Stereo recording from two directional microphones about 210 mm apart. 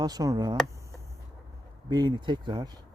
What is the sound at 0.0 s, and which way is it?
Speech, 15° right (ahead or behind).